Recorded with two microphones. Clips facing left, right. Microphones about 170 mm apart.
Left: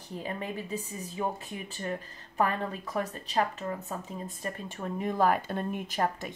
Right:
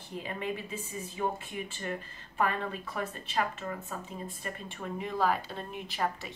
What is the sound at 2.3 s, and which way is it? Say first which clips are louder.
Speech: left 2 dB; 40° left (ahead or behind).